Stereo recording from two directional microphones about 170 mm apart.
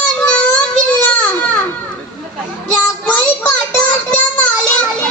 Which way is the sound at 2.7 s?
5° left (ahead or behind).